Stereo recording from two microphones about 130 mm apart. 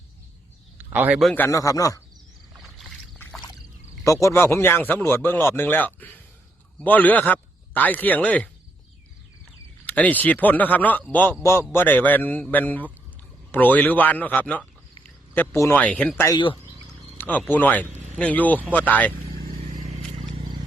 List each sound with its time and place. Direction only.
0.8 s a man's voice: 15° right (ahead or behind)
1.4 s speech: 25° left (ahead or behind)
2.6 s rowboat: centre (ahead or behind)
4.0 s speech: 25° left (ahead or behind)
9.8 s speech: 10° left (ahead or behind)
15.5 s speech: 25° left (ahead or behind)
15.8 s speech: 10° left (ahead or behind)
19.5 s vehicle: 70° right (ahead or behind)